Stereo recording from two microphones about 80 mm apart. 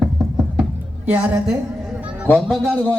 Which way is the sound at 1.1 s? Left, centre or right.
Centre.